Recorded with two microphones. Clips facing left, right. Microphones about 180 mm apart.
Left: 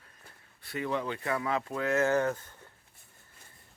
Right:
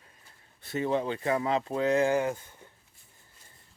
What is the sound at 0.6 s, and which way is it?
Speech, 25° right (ahead or behind).